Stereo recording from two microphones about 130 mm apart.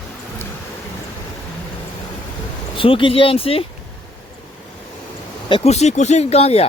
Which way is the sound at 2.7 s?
40° left (ahead or behind).